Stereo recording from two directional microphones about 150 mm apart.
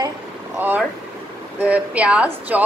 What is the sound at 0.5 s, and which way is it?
A woman's voice, 10° right (ahead or behind).